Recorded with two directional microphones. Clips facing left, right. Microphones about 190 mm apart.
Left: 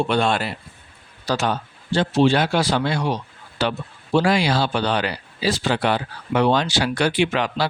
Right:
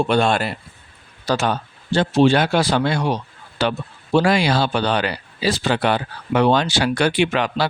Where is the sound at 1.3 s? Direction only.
55° right (ahead or behind).